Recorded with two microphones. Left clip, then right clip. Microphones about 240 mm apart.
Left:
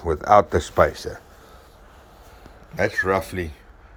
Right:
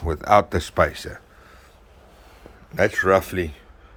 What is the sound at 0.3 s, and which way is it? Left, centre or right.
Speech, centre.